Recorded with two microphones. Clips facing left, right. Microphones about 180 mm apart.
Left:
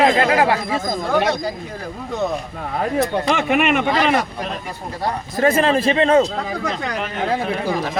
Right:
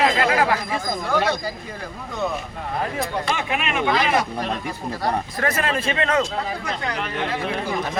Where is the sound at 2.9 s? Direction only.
60° left (ahead or behind).